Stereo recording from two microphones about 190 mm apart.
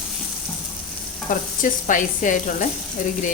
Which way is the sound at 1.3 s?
45° left (ahead or behind).